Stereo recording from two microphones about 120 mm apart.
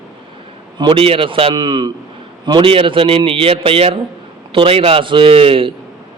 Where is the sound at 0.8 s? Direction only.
45° right (ahead or behind).